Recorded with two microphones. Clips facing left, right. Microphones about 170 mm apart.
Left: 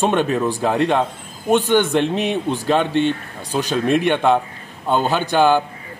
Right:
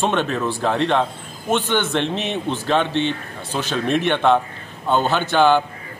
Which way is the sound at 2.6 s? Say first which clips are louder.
Left 1 dB; 10° left (ahead or behind).